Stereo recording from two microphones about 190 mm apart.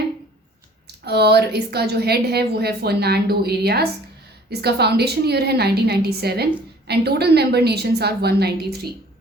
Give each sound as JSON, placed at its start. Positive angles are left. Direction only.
{"t": 1.0, "sound": "a woman's voice", "side_deg": -60}